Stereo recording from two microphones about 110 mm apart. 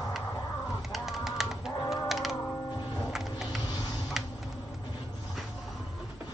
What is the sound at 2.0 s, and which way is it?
Music, centre (ahead or behind).